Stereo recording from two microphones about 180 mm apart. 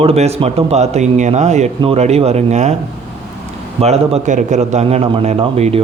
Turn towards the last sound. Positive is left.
turn(degrees=-35)  # may be behind; listen again after turning